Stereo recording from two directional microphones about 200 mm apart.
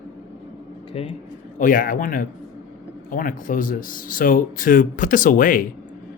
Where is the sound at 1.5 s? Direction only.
45° left (ahead or behind).